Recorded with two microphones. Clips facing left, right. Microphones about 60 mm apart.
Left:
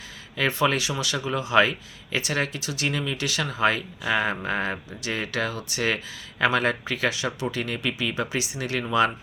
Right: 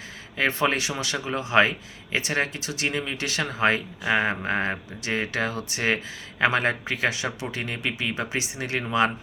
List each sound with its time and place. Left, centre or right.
0.3 s speech: right